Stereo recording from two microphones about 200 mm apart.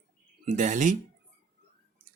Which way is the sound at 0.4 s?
40° right (ahead or behind).